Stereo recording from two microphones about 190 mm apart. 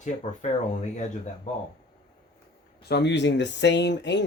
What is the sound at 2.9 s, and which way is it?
Speech, 65° left (ahead or behind).